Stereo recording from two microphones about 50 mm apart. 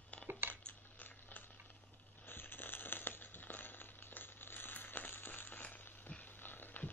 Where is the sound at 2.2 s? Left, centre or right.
Left.